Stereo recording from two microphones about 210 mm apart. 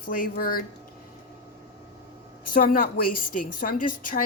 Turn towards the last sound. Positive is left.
turn(degrees=40)  # may be behind; listen again after turning